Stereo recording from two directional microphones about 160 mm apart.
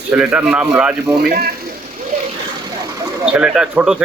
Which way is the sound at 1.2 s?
80° right.